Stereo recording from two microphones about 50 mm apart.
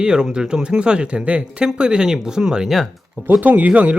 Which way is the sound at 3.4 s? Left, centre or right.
Right.